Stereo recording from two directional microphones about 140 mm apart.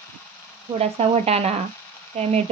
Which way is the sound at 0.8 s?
50° right (ahead or behind).